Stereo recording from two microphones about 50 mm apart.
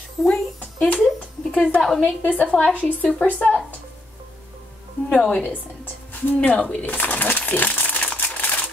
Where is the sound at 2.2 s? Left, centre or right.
Left.